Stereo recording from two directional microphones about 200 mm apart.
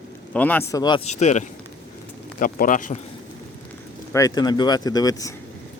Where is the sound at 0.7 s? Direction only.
20° left (ahead or behind).